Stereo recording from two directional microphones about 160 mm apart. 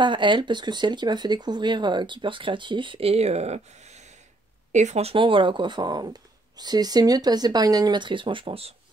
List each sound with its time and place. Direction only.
0.0 s speech: 30° right (ahead or behind)